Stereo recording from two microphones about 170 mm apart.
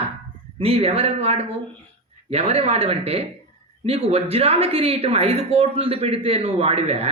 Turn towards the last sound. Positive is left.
turn(degrees=-35)  # may be behind; listen again after turning